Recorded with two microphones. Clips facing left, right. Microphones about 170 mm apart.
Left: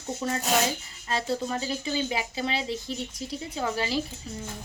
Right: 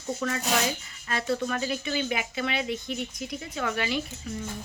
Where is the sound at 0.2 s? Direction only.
25° left (ahead or behind).